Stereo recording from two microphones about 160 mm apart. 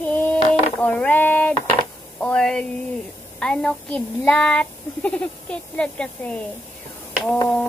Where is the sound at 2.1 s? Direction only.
5° left (ahead or behind).